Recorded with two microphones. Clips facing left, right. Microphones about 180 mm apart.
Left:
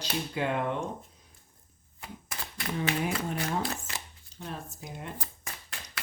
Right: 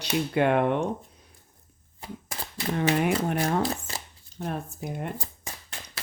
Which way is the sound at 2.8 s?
60° right (ahead or behind).